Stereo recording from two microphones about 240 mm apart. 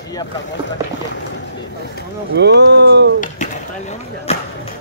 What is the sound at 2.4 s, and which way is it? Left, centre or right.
Speech, right.